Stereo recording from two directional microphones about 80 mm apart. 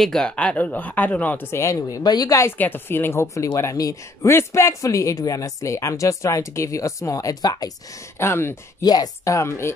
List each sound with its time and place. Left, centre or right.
0.0 s speech: centre
1.5 s speech: left
2.5 s speech: left
8.2 s speech: left
8.8 s speech: left